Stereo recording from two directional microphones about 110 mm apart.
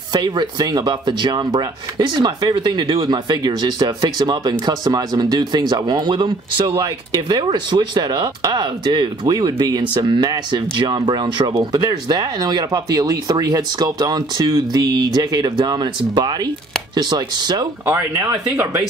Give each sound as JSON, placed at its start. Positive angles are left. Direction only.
{"t": 0.1, "sound": "speech", "side_deg": -40}
{"t": 18.6, "sound": "speech", "side_deg": -20}